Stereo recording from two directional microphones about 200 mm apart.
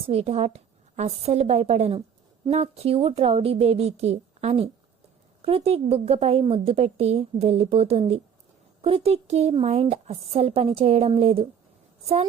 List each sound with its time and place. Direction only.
0.1 s a woman's voice: 30° right (ahead or behind)